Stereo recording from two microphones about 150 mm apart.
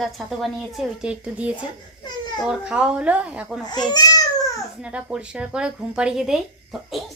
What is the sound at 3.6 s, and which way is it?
Speech, 25° left (ahead or behind).